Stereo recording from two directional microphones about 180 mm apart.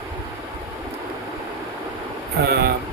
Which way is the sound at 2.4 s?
65° right (ahead or behind).